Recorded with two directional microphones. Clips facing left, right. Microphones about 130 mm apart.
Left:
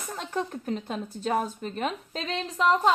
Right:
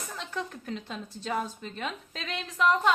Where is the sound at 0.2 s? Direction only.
40° left (ahead or behind).